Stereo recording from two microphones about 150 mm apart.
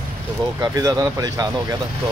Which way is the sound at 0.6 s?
25° right (ahead or behind).